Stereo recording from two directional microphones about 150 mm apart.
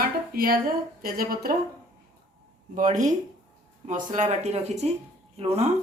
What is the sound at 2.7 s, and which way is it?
Speech, 55° right (ahead or behind).